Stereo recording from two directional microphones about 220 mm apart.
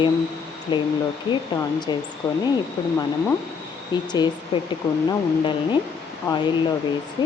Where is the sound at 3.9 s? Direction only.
20° left (ahead or behind).